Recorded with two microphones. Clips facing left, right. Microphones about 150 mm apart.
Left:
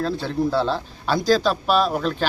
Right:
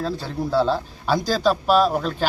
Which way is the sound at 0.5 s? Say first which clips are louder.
Right 2 dB; 5° right (ahead or behind).